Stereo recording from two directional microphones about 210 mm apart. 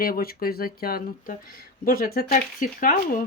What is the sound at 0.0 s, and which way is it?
Speech, 45° left (ahead or behind).